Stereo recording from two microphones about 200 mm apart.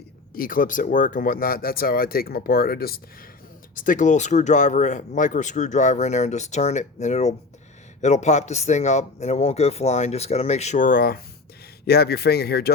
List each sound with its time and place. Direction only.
0.3 s speech: 45° left (ahead or behind)